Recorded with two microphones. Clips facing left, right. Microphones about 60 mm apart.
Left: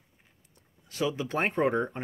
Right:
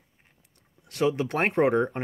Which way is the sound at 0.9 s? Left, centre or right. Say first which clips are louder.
Right 4 dB; right.